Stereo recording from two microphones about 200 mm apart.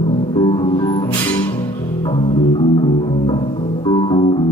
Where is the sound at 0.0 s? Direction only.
30° left (ahead or behind).